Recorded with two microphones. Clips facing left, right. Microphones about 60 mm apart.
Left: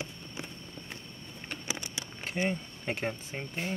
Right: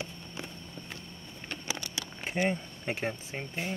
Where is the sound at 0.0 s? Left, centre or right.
Left.